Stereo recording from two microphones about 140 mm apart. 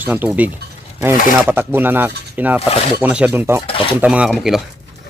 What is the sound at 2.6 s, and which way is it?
Speech, 45° left (ahead or behind).